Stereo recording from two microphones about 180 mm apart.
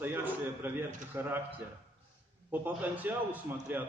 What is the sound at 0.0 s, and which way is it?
A man's voice, 10° right (ahead or behind).